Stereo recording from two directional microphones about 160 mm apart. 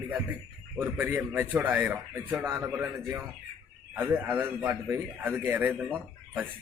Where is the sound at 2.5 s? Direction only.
15° right (ahead or behind).